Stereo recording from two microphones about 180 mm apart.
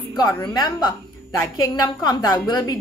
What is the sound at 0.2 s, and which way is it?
A woman's voice, 20° left (ahead or behind).